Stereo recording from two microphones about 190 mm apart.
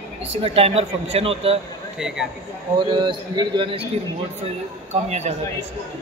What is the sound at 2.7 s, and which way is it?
A man's voice, 25° right (ahead or behind).